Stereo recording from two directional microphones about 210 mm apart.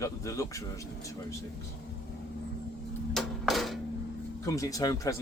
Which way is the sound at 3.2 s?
Centre (ahead or behind).